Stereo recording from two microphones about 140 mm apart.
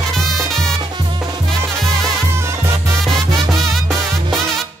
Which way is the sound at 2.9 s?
Centre (ahead or behind).